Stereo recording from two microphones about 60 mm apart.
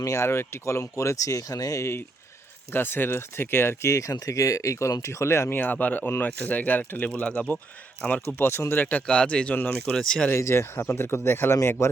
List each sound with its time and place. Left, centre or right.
0.0 s speech: left
2.7 s speech: left
5.5 s speech: left
8.4 s speech: left
9.0 s speech: centre
10.3 s speech: left